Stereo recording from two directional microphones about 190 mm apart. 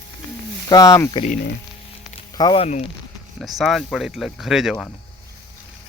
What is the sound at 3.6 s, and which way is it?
Speech, centre (ahead or behind).